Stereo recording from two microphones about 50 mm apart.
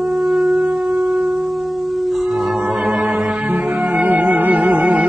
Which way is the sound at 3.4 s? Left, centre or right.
Right.